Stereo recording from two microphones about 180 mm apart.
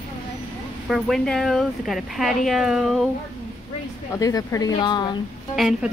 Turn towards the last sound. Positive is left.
turn(degrees=0)  # may be behind; listen again after turning